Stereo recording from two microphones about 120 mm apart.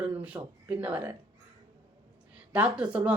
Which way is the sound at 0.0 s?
10° right (ahead or behind).